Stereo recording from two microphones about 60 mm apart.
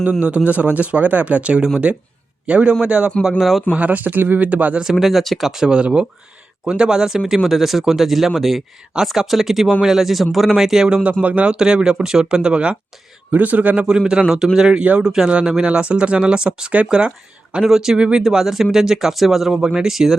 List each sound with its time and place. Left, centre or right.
0.2 s speech: right
3.2 s speech: centre
3.8 s speech: right
4.8 s a man's voice: centre; by 13.8 s right
13.8 s a man's voice: centre